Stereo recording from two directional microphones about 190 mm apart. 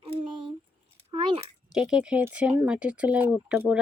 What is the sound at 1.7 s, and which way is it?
Speech, 5° right (ahead or behind).